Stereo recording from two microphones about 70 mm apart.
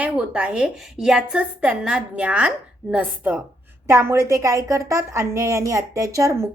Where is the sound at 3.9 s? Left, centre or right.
Right.